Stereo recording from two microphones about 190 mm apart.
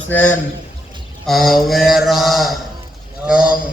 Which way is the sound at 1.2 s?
Centre (ahead or behind).